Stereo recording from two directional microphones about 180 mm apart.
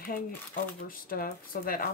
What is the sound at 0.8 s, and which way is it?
Speech, 55° left (ahead or behind).